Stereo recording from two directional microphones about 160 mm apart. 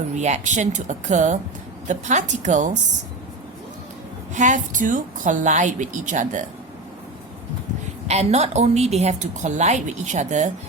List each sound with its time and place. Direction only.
0.2 s a woman's voice: 50° right (ahead or behind)
4.4 s a woman's voice: 50° right (ahead or behind)
8.0 s a woman's voice: 45° right (ahead or behind)